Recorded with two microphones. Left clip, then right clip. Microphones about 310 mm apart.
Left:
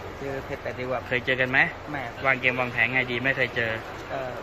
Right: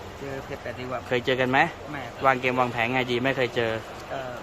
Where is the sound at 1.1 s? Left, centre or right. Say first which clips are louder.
Right 1 dB; right.